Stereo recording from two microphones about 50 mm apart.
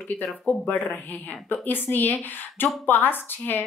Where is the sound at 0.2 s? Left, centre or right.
Left.